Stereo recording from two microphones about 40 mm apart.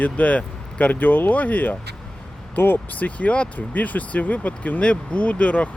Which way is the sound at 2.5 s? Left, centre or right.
Left.